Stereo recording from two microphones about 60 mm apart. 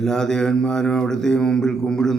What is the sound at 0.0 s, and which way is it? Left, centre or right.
Speech, centre.